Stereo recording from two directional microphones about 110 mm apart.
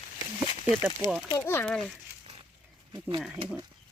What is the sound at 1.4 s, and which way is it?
Speech, 20° left (ahead or behind).